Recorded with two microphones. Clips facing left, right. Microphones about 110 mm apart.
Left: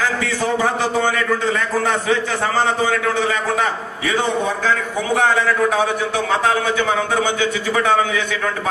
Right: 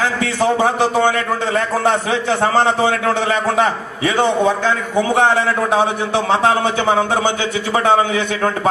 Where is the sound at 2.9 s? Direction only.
40° right (ahead or behind).